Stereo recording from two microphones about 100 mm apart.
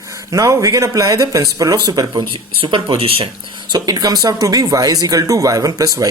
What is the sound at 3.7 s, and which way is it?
Speech, 40° right (ahead or behind).